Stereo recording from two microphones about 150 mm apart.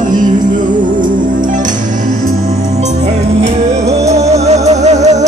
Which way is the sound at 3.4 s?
45° right (ahead or behind).